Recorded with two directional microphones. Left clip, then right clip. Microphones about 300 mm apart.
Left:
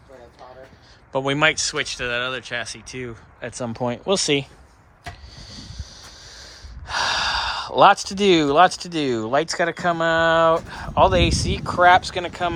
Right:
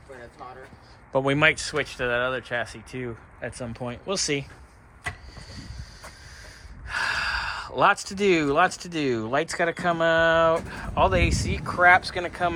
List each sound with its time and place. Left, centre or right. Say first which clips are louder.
1.1 s speech: left 2 dB; centre
3.5 s speech: left 8 dB; centre
5.4 s snort: left 4 dB; centre